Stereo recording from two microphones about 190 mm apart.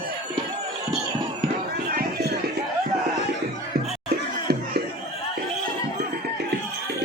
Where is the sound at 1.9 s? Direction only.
60° right (ahead or behind).